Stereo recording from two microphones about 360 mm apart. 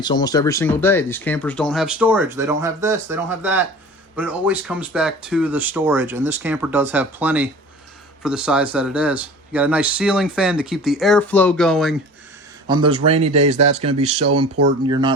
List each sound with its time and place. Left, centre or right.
0.0 s speech: centre
12.6 s speech: centre